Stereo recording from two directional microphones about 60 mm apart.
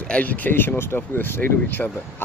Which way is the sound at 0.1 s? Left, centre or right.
Left.